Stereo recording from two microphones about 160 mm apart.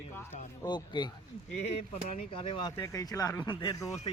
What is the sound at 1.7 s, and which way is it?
Speech, 40° left (ahead or behind).